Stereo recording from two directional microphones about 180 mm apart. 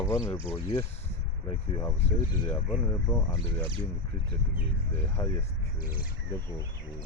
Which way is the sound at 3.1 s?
10° left (ahead or behind).